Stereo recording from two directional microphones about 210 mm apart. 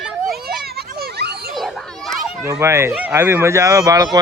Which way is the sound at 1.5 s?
Centre (ahead or behind).